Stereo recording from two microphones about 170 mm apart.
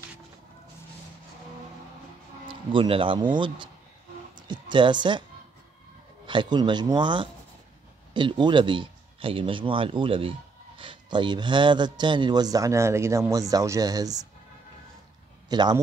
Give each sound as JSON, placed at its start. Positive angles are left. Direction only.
{"t": 2.4, "sound": "speech", "side_deg": -30}
{"t": 6.2, "sound": "a man's voice", "side_deg": -25}
{"t": 15.5, "sound": "a man's voice", "side_deg": -25}